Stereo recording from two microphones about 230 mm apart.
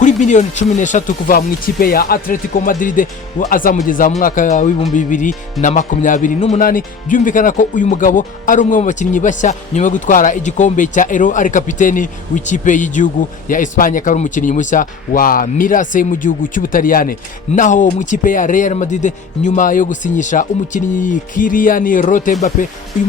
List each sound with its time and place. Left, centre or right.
0.0 s speech: left